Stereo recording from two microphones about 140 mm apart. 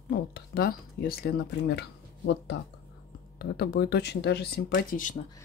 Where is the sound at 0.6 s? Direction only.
90° left.